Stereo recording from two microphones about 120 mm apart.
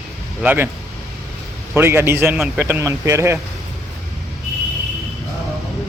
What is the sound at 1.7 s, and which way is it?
Speech, 20° right (ahead or behind).